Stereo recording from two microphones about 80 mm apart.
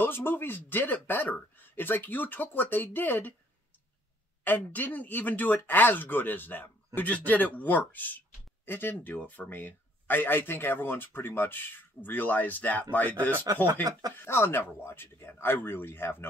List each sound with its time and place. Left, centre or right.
0.0 s speech: left
4.5 s speech: left
13.5 s speech: right
14.1 s speech: left